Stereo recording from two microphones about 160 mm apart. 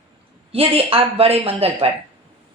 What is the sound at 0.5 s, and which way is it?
A woman's voice, 35° right (ahead or behind).